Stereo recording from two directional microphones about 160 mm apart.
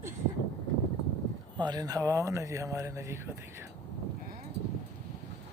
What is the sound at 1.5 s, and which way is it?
Speech, 25° right (ahead or behind).